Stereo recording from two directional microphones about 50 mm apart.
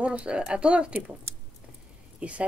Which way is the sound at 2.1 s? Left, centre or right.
Right.